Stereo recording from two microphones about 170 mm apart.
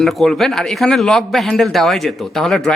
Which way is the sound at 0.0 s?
Centre (ahead or behind).